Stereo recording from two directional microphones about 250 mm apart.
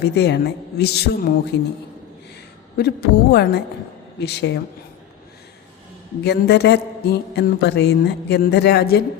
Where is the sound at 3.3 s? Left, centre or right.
Left.